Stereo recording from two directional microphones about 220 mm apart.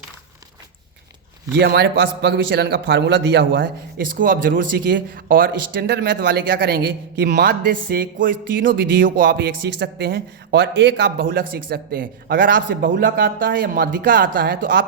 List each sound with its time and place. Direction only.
1.5 s a man's voice: 50° right (ahead or behind)
4.5 s speech: 55° right (ahead or behind)
5.1 s a man's voice: 40° right (ahead or behind)